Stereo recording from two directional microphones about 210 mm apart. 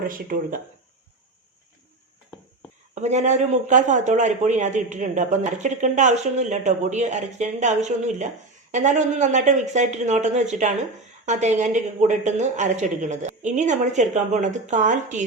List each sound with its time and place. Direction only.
0.0 s a man's voice: 40° right (ahead or behind)
2.9 s a man's voice: 35° right (ahead or behind)